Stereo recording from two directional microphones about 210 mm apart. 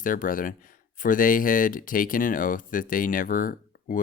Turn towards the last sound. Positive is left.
turn(degrees=40)  # may be behind; listen again after turning